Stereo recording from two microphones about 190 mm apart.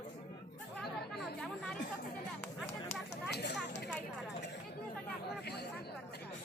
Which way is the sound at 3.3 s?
65° left (ahead or behind).